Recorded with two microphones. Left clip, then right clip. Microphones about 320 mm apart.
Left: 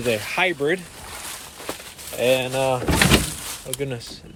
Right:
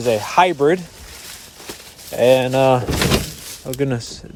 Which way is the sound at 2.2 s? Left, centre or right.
Right.